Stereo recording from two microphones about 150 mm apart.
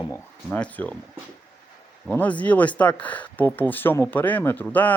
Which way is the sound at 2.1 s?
10° left (ahead or behind).